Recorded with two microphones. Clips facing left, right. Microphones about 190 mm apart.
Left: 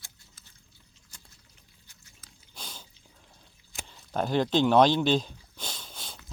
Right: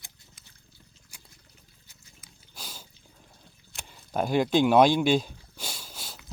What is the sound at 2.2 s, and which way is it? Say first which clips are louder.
Dog: even; 5° right (ahead or behind).